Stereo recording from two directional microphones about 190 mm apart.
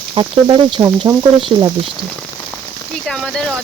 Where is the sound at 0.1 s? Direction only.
25° right (ahead or behind).